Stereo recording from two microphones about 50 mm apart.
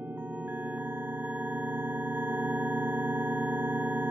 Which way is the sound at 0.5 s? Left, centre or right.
Right.